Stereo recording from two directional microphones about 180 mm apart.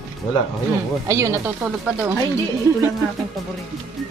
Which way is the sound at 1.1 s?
15° right (ahead or behind).